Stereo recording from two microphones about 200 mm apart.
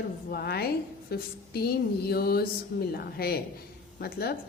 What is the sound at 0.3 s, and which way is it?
A woman's voice, 50° left (ahead or behind).